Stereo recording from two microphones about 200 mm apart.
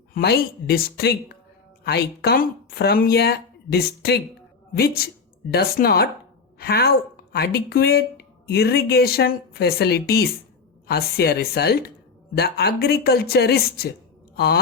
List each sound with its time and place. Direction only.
0.1 s speech: 50° left (ahead or behind)